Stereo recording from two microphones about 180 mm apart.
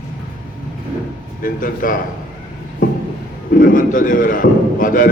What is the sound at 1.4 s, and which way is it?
Speech, 50° left (ahead or behind).